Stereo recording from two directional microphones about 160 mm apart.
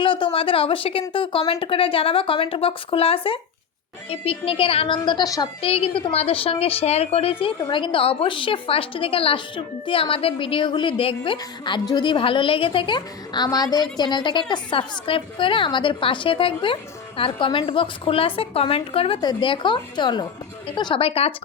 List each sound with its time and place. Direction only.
0.0 s a woman's voice: 30° left (ahead or behind)
5.6 s a woman's voice: 35° left (ahead or behind)